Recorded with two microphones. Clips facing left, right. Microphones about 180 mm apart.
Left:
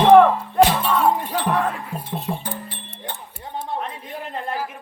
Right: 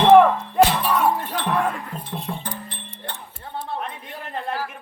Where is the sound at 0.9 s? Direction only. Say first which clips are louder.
Left 1 dB; 25° left (ahead or behind).